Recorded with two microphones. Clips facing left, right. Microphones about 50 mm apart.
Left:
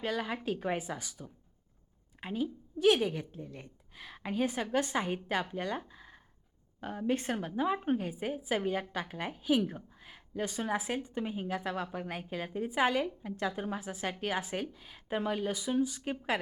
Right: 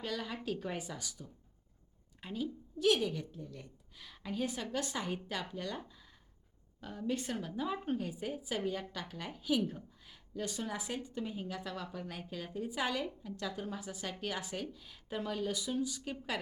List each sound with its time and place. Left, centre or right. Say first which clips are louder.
0.0 s a woman's voice: left 5 dB; left
5.9 s a sound: left 7 dB; left
6.7 s a woman's voice: left 5 dB; left